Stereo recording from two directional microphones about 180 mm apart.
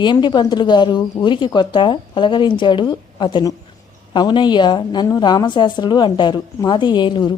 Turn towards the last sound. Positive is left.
turn(degrees=25)  # may be behind; listen again after turning